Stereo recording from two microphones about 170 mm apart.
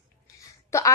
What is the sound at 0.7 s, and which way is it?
Speech, 20° left (ahead or behind).